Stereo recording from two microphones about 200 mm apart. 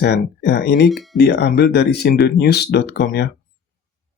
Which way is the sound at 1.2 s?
55° left (ahead or behind).